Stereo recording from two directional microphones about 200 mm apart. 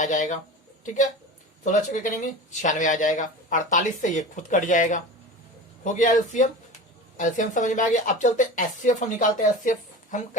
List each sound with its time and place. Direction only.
0.0 s speech: 40° left (ahead or behind)
1.6 s speech: 40° left (ahead or behind)